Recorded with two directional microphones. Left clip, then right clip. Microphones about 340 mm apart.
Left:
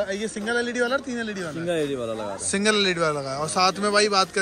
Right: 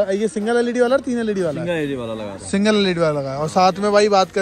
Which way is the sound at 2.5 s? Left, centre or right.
Centre.